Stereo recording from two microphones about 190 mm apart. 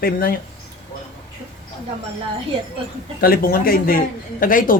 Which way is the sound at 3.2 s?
50° left (ahead or behind).